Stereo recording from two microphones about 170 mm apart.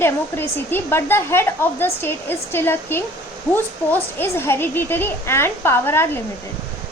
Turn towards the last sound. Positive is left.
turn(degrees=15)  # may be behind; listen again after turning